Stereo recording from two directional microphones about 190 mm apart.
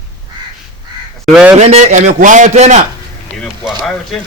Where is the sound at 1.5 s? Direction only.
35° right (ahead or behind).